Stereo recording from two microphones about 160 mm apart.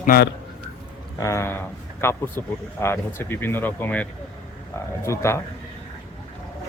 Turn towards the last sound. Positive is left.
turn(degrees=15)  # may be behind; listen again after turning